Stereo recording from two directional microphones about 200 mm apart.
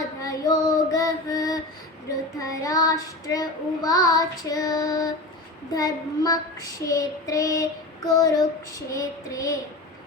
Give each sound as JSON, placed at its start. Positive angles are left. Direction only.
{"t": 0.2, "sound": "child singing", "side_deg": 15}